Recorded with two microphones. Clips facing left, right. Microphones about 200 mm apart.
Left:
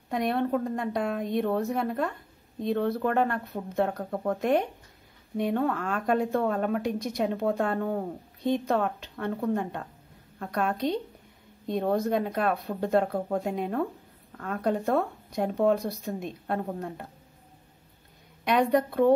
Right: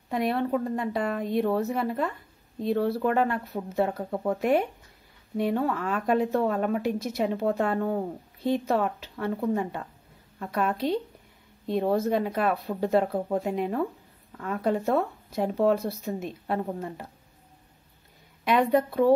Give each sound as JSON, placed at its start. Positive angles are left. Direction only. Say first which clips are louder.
{"t": 0.1, "sound": "a woman's voice", "louder": "even", "side_deg": 0}
{"t": 18.4, "sound": "a woman's voice", "louder": "right 1 dB", "side_deg": 0}